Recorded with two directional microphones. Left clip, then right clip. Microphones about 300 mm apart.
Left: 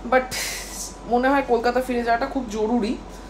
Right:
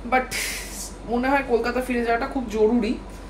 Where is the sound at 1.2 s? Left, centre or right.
Centre.